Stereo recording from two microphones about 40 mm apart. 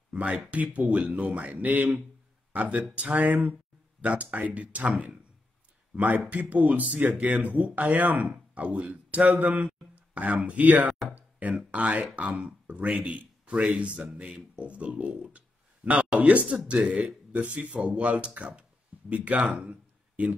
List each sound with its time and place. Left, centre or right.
0.1 s speech: right
5.9 s speech: right
11.1 s a sound: right
11.7 s speech: right
13.0 s a man's voice: right
17.3 s speech: right
19.6 s a sound: right